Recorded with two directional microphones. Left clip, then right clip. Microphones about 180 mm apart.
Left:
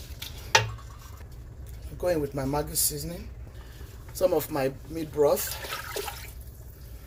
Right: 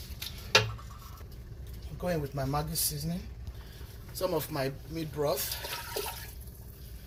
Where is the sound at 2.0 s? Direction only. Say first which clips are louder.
Left 6 dB; 60° left (ahead or behind).